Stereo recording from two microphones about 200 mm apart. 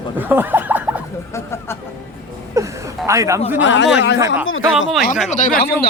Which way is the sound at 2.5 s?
15° right (ahead or behind).